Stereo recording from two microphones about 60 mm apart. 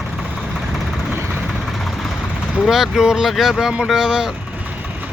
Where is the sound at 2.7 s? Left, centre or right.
Centre.